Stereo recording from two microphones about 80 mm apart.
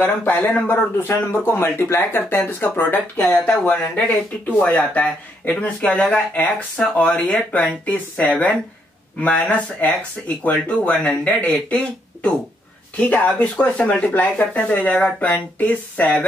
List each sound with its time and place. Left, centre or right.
0.0 s speech: left